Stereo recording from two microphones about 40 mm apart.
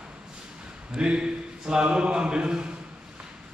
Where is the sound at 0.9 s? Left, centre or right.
Right.